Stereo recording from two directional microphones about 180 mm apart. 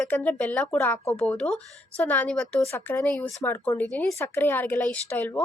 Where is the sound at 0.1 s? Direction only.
10° left (ahead or behind).